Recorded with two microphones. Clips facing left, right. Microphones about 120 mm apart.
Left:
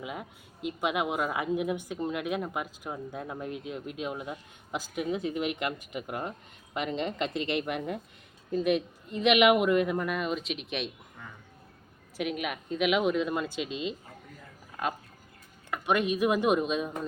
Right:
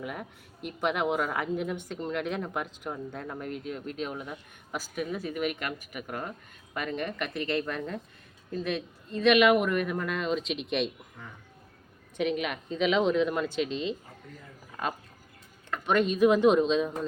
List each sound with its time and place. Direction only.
0.0 s a woman's voice: 15° left (ahead or behind)
12.1 s speech: 5° left (ahead or behind)
15.7 s speech: 10° left (ahead or behind)